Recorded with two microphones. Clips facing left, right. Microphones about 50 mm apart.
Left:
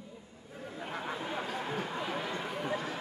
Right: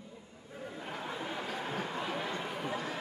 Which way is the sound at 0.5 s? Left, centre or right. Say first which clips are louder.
Left 1 dB; centre.